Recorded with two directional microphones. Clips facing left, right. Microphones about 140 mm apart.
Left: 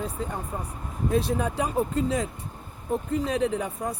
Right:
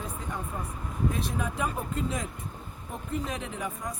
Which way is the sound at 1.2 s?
35° left (ahead or behind).